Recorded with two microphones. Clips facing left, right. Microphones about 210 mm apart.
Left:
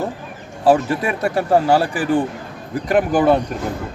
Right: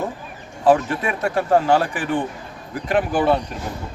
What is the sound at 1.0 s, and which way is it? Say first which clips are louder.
Speech: left 2 dB; 35° left (ahead or behind).